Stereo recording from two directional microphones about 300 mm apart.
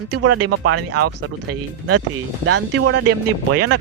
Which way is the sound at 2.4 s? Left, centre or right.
Right.